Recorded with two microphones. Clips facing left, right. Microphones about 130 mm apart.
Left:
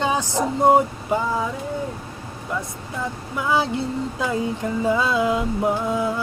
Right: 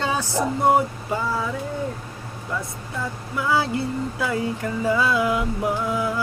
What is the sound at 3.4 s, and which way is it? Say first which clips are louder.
Speech: left 1 dB; 20° left (ahead or behind).